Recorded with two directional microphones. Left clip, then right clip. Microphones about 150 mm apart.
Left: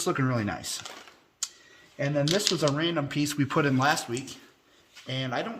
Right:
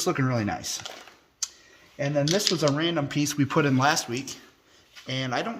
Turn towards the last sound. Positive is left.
turn(degrees=-45)  # may be behind; listen again after turning